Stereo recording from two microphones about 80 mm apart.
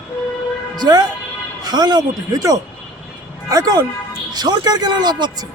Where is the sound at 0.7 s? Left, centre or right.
Right.